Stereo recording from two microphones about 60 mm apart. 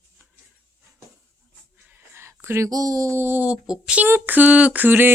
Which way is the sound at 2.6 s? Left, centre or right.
Right.